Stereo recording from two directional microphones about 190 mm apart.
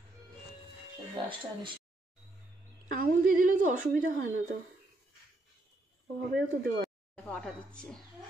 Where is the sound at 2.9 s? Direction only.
45° right (ahead or behind).